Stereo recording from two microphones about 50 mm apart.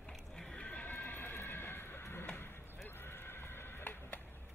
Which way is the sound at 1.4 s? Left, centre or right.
Left.